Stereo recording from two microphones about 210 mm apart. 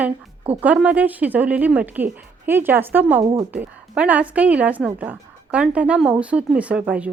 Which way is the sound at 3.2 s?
25° right (ahead or behind).